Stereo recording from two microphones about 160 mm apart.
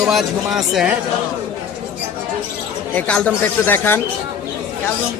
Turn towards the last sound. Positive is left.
turn(degrees=15)  # may be behind; listen again after turning